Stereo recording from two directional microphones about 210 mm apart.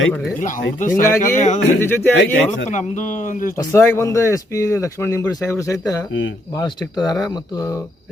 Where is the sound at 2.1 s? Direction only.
60° left (ahead or behind).